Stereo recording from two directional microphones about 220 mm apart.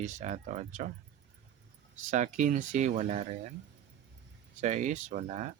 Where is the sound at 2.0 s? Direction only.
35° right (ahead or behind).